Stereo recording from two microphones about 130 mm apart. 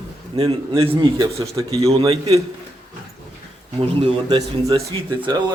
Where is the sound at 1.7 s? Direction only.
50° right (ahead or behind).